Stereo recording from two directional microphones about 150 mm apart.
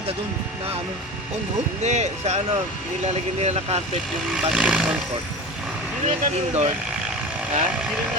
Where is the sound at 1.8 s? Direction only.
50° right (ahead or behind).